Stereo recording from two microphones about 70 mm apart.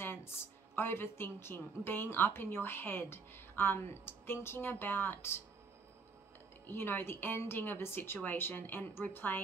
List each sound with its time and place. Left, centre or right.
0.0 s a sound: left
0.7 s a woman's voice: left
6.6 s a woman's voice: left